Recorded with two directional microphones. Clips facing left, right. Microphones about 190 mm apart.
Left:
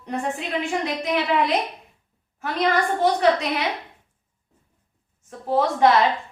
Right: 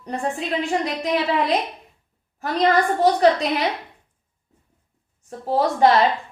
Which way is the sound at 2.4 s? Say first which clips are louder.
Right 3 dB; 35° right (ahead or behind).